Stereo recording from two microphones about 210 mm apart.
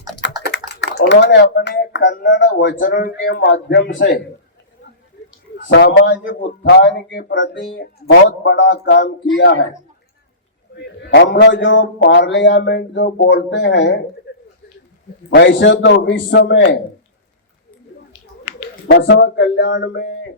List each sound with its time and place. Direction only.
0.5 s speech: 55° left (ahead or behind)
2.8 s speech: 40° left (ahead or behind)
3.4 s speech: 60° left (ahead or behind)
5.7 s speech: 60° left (ahead or behind)
11.1 s speech: 55° left (ahead or behind)
15.4 s speech: 60° left (ahead or behind)
18.9 s speech: 65° left (ahead or behind)